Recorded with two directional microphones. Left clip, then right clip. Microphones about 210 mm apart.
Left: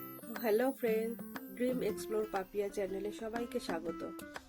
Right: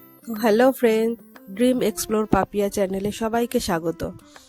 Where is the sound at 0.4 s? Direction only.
55° right (ahead or behind).